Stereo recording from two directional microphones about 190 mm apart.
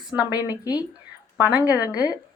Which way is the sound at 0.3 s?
20° left (ahead or behind).